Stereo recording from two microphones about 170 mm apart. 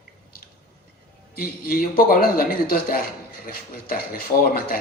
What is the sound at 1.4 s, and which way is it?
A man's voice, 60° left (ahead or behind).